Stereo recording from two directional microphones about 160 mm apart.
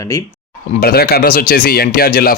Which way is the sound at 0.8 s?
75° left (ahead or behind).